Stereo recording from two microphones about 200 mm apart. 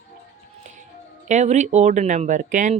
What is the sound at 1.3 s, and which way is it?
Speech, 35° right (ahead or behind).